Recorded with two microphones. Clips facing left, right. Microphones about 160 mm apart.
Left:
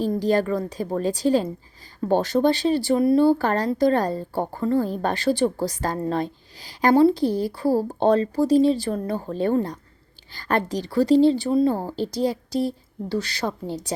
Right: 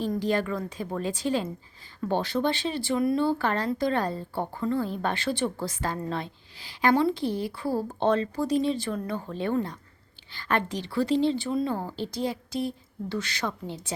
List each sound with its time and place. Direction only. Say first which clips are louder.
0.1 s speech: left 6 dB; 35° left (ahead or behind)